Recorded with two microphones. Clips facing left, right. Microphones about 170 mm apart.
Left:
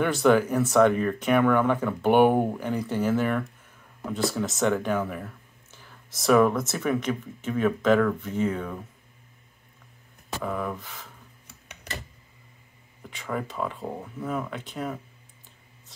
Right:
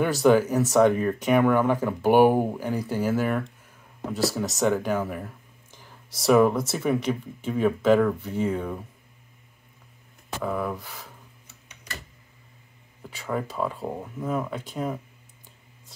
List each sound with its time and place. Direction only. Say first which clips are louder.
0.0 s speech: right 1 dB; 10° right (ahead or behind)
10.4 s speech: right 2 dB; 5° right (ahead or behind)
13.0 s speech: right 2 dB; 10° right (ahead or behind)